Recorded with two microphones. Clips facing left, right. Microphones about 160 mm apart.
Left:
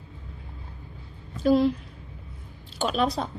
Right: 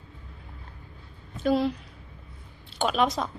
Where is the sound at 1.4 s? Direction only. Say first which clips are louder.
Left 4 dB; 40° left (ahead or behind).